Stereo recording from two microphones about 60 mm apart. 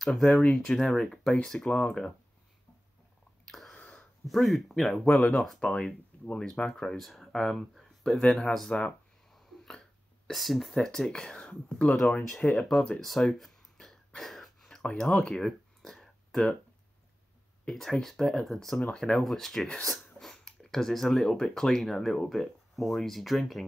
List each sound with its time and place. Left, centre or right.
0.2 s speech: left
0.7 s speech: centre
3.4 s a sound: centre
4.2 s speech: centre
5.6 s speech: centre
13.0 s a sound: centre
14.8 s a sound: centre
17.6 s speech: centre
18.8 s speech: centre